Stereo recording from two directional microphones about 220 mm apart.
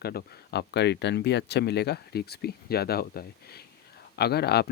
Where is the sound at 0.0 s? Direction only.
45° left (ahead or behind).